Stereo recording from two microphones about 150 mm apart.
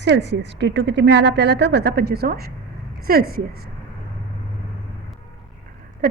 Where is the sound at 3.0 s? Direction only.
75° right (ahead or behind).